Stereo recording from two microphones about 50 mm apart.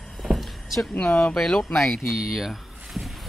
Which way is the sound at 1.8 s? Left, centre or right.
Centre.